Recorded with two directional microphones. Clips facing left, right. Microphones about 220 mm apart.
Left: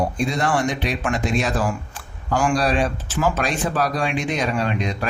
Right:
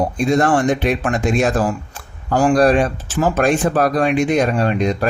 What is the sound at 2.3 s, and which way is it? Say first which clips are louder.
Speech: right 5 dB; 35° right (ahead or behind).